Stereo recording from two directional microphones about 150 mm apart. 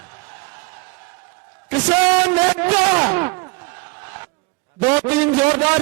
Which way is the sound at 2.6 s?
15° right (ahead or behind).